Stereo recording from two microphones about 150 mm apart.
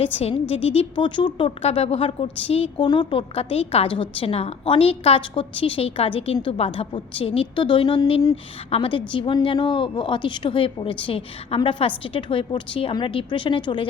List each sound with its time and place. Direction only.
0.0 s a woman's voice: 40° left (ahead or behind)